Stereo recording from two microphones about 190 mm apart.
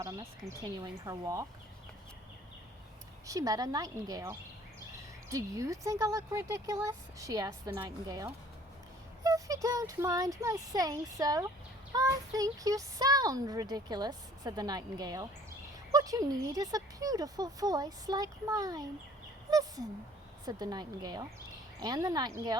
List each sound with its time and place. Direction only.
1.0 s speech: 15° right (ahead or behind)
3.2 s a child's voice: 20° right (ahead or behind)